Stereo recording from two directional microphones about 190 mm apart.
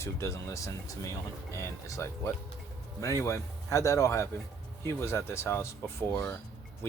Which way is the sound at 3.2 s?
15° left (ahead or behind).